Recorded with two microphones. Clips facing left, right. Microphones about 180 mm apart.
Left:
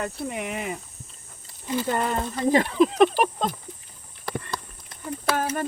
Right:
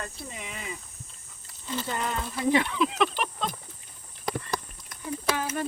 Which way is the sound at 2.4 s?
40° left (ahead or behind).